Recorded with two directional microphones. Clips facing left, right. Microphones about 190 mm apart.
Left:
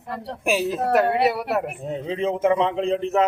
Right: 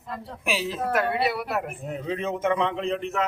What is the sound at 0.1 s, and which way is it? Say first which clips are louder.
Speech: left 5 dB; 70° left (ahead or behind).